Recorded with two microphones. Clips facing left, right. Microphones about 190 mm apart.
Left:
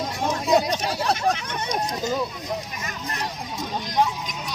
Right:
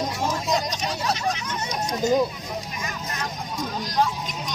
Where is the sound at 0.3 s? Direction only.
60° left (ahead or behind).